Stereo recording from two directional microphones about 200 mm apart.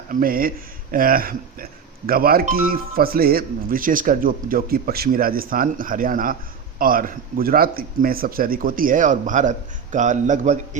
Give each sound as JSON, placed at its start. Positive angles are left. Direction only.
{"t": 0.1, "sound": "speech", "side_deg": -45}